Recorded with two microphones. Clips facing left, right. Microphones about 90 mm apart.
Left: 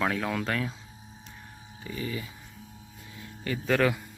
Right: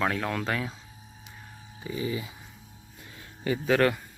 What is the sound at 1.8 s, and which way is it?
Speech, 15° right (ahead or behind).